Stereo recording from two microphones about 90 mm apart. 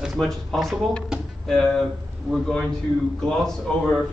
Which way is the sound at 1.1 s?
10° right (ahead or behind).